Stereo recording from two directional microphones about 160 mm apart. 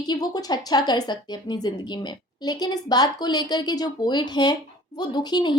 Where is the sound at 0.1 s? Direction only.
25° left (ahead or behind).